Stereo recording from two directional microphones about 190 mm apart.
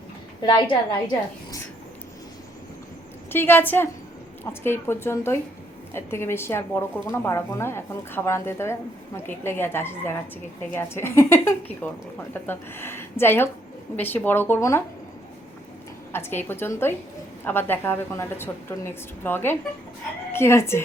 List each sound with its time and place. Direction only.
0.4 s a woman's voice: 25° left (ahead or behind)
3.2 s speech: 10° left (ahead or behind)
16.1 s speech: 10° left (ahead or behind)